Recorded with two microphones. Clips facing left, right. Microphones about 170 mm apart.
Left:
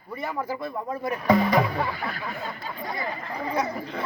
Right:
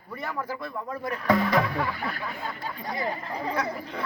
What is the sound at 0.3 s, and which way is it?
Speech, 20° left (ahead or behind).